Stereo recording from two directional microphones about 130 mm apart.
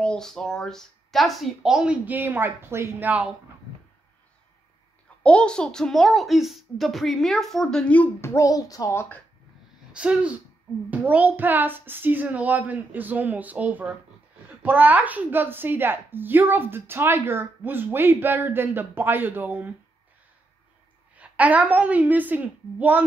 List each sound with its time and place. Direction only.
0.0 s a child's voice: 5° left (ahead or behind); by 3.3 s 10° right (ahead or behind)
5.2 s a child's voice: 10° left (ahead or behind); by 9.0 s 25° left (ahead or behind)
9.9 s a woman's voice: 10° right (ahead or behind)
21.2 s a woman's voice: 10° right (ahead or behind)